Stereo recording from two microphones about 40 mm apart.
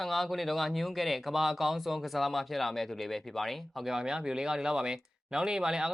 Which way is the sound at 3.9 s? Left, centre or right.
Centre.